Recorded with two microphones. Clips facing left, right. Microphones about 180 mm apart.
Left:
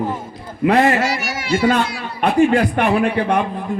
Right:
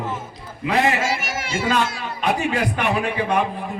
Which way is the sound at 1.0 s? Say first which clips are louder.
Left 3 dB; 50° right (ahead or behind).